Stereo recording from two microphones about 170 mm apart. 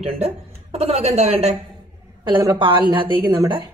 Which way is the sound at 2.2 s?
25° right (ahead or behind).